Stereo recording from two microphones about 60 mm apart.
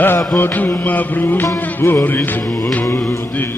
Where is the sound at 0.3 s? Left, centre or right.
Left.